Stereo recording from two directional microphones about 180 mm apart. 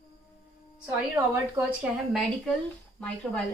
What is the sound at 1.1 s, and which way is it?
Speech, 15° right (ahead or behind).